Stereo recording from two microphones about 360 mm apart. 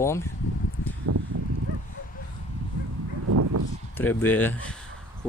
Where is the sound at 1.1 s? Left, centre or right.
Right.